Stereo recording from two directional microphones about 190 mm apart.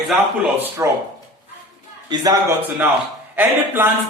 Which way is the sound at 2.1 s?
20° right (ahead or behind).